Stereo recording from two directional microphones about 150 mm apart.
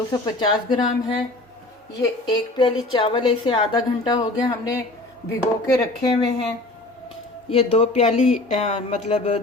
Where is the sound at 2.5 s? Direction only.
35° left (ahead or behind).